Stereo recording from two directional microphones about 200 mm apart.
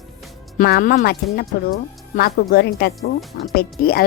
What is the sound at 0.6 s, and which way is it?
Speech, 45° left (ahead or behind).